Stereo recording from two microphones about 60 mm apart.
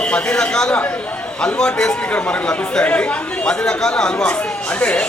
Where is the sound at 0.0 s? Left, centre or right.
Centre.